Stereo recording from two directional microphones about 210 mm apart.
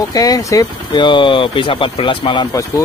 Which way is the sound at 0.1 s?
15° left (ahead or behind).